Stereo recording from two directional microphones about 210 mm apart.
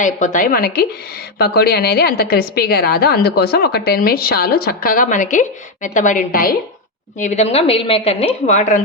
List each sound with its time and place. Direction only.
0.0 s a woman's voice: 35° left (ahead or behind)